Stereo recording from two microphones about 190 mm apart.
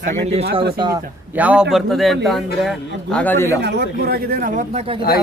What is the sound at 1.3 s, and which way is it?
A man's voice, 5° right (ahead or behind).